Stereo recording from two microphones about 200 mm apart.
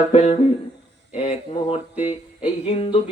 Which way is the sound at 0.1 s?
35° left (ahead or behind).